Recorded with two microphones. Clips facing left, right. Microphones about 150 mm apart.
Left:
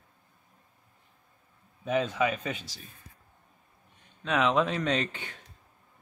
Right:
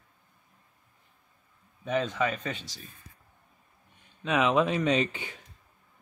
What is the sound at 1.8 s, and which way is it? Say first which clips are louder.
Speech: left 1 dB; 5° left (ahead or behind).